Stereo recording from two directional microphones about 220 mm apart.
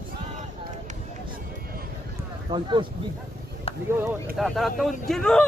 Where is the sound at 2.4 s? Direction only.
20° right (ahead or behind).